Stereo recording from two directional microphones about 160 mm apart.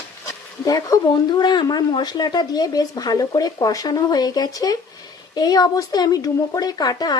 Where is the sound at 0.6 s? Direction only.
20° left (ahead or behind).